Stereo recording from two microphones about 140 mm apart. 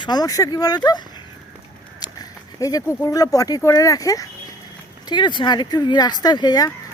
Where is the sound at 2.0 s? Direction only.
25° left (ahead or behind).